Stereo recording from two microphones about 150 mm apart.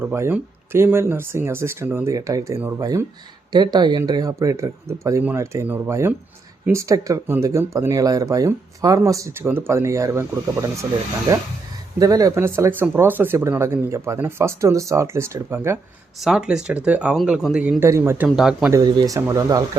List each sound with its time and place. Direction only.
0.0 s speech: 15° right (ahead or behind)
16.2 s speech: 5° right (ahead or behind)
17.8 s speech: 20° right (ahead or behind)
18.3 s speech: 5° right (ahead or behind)
18.7 s speech: 25° right (ahead or behind)